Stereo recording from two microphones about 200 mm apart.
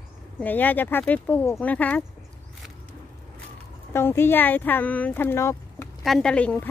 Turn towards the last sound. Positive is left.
turn(degrees=10)  # may be behind; listen again after turning